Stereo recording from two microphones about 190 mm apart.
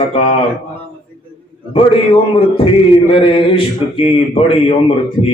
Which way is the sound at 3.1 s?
30° left (ahead or behind).